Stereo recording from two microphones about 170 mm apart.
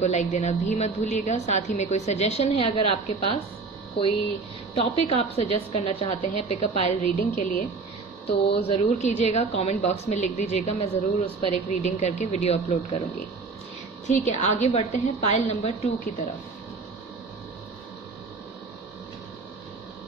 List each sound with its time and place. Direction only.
0.0 s a woman's voice: 45° left (ahead or behind)
4.7 s a woman's voice: 35° left (ahead or behind)
8.6 s a woman's voice: 40° left (ahead or behind)
14.0 s a woman's voice: 45° left (ahead or behind)